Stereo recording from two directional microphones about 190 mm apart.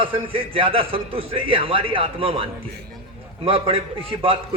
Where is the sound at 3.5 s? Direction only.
30° right (ahead or behind).